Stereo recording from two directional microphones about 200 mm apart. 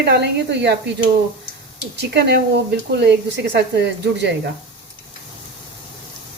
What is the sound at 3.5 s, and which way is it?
Speech, 60° right (ahead or behind).